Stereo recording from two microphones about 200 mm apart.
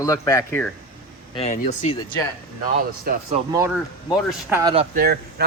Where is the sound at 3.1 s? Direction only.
45° right (ahead or behind).